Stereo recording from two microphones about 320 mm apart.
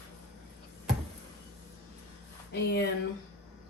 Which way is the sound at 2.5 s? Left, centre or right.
Left.